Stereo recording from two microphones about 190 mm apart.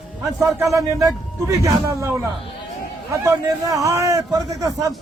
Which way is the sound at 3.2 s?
15° right (ahead or behind).